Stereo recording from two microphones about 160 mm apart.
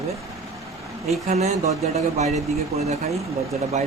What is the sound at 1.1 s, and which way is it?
Speech, 45° right (ahead or behind).